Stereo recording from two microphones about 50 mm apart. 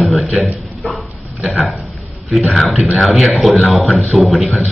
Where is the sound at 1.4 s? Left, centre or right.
Centre.